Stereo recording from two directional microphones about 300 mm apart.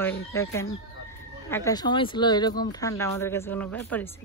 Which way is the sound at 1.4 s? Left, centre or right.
Centre.